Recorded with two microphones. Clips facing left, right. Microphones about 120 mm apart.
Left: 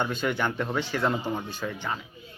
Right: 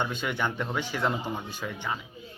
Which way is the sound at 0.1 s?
15° right (ahead or behind).